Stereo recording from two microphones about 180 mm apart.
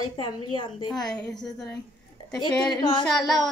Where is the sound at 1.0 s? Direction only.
5° left (ahead or behind).